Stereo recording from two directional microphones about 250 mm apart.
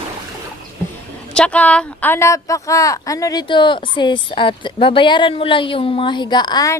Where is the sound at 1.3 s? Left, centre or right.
Centre.